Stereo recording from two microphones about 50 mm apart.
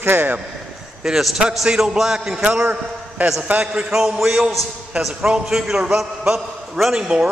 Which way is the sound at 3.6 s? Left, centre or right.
Centre.